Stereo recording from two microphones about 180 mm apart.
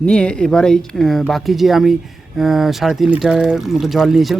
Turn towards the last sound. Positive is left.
turn(degrees=0)  # may be behind; listen again after turning